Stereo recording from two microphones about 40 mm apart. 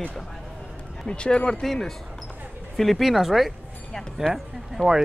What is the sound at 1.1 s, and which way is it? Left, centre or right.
Speech, left.